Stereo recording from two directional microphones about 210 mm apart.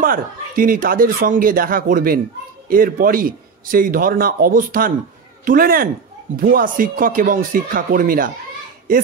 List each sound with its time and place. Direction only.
0.0 s a man's voice: 40° right (ahead or behind)